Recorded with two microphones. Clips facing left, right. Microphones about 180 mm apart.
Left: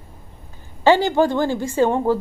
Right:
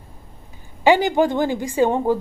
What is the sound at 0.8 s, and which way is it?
A woman's voice, 15° right (ahead or behind).